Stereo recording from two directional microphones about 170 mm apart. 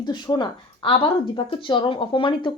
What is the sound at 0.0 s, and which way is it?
A woman's voice, 25° left (ahead or behind).